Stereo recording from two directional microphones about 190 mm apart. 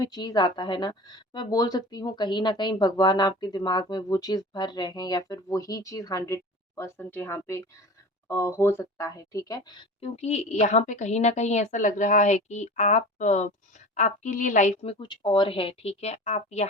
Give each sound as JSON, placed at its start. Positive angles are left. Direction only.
{"t": 0.0, "sound": "a woman's voice", "side_deg": 20}